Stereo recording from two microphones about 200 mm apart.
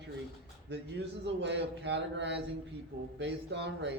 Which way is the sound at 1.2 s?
60° right (ahead or behind).